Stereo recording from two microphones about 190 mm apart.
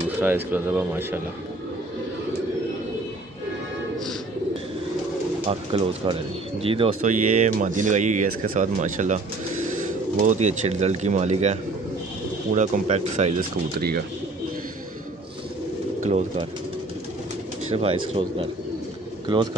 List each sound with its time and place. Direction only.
0.2 s speech: 10° right (ahead or behind)
5.5 s speech: 25° right (ahead or behind)
7.0 s speech: 40° right (ahead or behind)
10.2 s speech: 40° right (ahead or behind)
12.5 s speech: 35° right (ahead or behind)
13.7 s speech: 50° right (ahead or behind)
16.0 s speech: 35° right (ahead or behind)
17.6 s speech: 30° right (ahead or behind)